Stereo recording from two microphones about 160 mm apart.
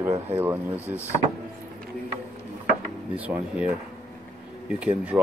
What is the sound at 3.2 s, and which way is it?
Speech, 10° right (ahead or behind).